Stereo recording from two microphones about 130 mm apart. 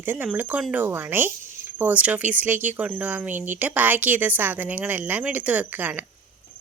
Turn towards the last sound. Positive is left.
turn(degrees=-15)  # may be behind; listen again after turning